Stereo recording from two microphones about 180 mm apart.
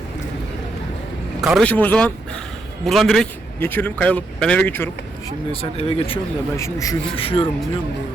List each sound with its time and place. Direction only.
1.4 s a man's voice: centre (ahead or behind)
5.5 s speech: 35° left (ahead or behind)
6.6 s a man's voice: 15° left (ahead or behind)
7.2 s speech: 30° left (ahead or behind)